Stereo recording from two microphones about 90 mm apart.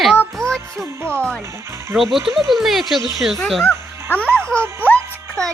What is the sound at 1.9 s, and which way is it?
Speech, 5° right (ahead or behind).